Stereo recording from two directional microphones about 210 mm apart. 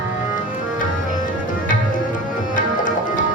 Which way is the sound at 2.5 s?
40° left (ahead or behind).